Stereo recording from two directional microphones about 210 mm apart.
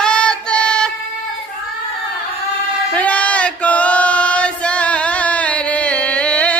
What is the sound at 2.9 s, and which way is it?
Male singing, 5° left (ahead or behind).